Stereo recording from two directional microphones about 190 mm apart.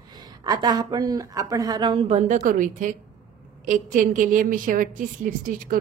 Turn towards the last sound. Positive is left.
turn(degrees=-45)  # may be behind; listen again after turning